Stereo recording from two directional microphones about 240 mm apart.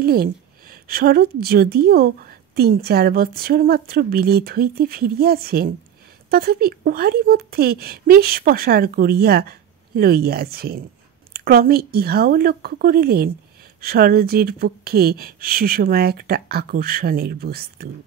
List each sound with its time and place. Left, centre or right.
0.0 s a woman's voice: right